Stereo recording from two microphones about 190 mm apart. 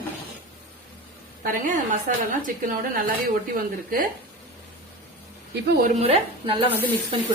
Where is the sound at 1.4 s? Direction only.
45° right (ahead or behind).